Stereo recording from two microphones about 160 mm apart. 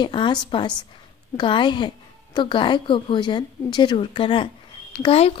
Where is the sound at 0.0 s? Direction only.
30° left (ahead or behind).